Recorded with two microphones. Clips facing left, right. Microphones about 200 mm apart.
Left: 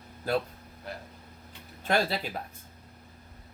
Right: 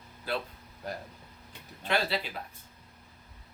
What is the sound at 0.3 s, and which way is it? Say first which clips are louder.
Speech: left 5 dB; 45° left (ahead or behind).